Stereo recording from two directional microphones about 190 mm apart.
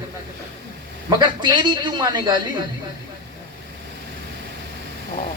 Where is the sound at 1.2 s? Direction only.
25° right (ahead or behind).